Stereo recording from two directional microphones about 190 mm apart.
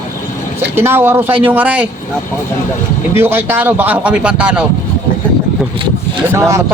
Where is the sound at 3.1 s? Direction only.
10° right (ahead or behind).